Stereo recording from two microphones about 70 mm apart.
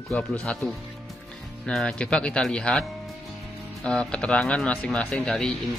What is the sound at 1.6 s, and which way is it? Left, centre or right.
Speech, centre.